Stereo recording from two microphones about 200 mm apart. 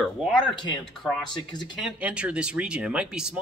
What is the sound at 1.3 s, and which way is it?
Speech, 20° left (ahead or behind).